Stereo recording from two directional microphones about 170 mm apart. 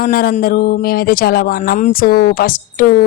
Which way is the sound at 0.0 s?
60° left (ahead or behind).